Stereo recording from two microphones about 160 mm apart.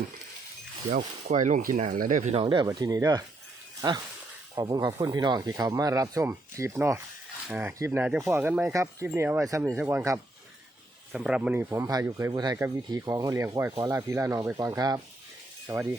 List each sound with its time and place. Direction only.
0.9 s speech: 50° right (ahead or behind)
2.3 s speech: 30° right (ahead or behind)
11.1 s speech: 5° right (ahead or behind)
11.7 s speech: 20° right (ahead or behind)